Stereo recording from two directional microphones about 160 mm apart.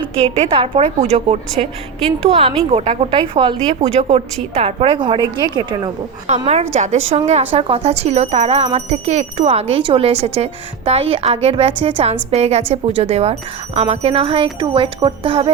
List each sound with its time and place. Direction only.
0.3 s a woman's voice: 35° right (ahead or behind)
6.2 s a woman's voice: 45° right (ahead or behind)